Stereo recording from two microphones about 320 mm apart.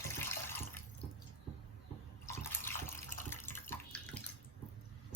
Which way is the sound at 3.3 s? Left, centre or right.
Centre.